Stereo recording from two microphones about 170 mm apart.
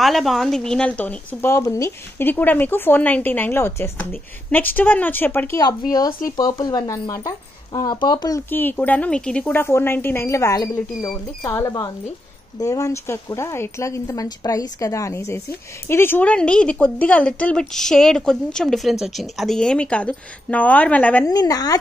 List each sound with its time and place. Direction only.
0.0 s speech: centre (ahead or behind)
21.3 s a woman's voice: 20° left (ahead or behind)